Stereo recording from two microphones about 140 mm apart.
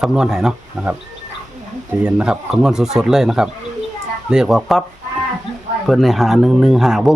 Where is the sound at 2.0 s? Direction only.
5° right (ahead or behind).